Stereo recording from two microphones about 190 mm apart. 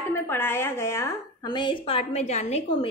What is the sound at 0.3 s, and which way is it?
A woman's voice, 10° left (ahead or behind).